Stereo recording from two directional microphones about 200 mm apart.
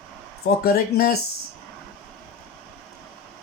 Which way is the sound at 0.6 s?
50° left (ahead or behind).